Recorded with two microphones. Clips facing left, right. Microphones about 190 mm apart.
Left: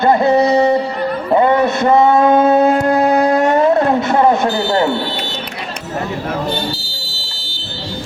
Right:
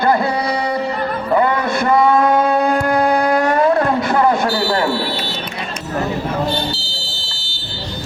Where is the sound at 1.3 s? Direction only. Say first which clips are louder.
Left 4 dB; 25° left (ahead or behind).